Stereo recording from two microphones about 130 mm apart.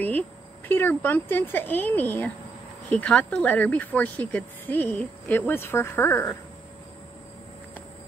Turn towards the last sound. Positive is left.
turn(degrees=20)  # may be behind; listen again after turning